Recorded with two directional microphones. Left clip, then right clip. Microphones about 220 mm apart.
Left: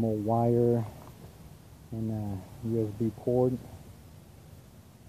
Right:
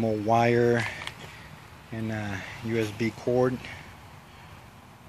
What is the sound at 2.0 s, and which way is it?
Speech, 20° right (ahead or behind).